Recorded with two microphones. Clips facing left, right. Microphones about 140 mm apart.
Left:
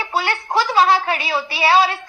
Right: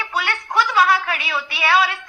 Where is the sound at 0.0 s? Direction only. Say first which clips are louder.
Left 3 dB; 30° left (ahead or behind).